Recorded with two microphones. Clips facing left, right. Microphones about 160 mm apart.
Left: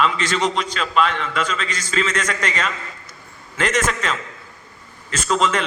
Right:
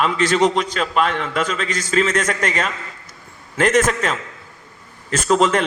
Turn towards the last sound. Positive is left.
turn(degrees=-50)  # may be behind; listen again after turning